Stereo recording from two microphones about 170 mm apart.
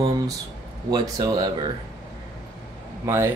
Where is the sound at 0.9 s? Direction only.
25° right (ahead or behind).